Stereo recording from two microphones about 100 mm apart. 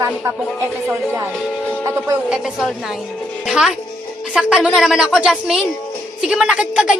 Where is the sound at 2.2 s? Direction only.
10° right (ahead or behind).